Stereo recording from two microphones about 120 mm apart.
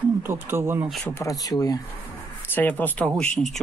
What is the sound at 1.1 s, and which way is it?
Speech, 25° left (ahead or behind).